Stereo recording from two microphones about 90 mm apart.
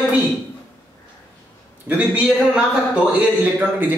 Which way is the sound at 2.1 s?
10° right (ahead or behind).